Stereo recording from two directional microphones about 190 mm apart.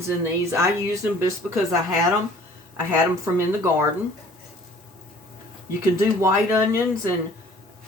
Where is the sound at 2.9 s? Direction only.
15° right (ahead or behind).